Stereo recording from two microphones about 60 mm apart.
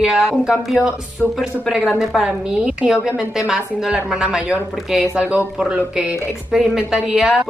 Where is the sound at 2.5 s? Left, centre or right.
Centre.